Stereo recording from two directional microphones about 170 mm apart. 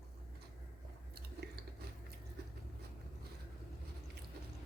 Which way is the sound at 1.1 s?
70° right (ahead or behind).